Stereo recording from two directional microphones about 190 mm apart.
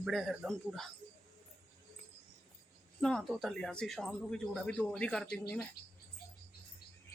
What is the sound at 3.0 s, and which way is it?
Speech, centre (ahead or behind).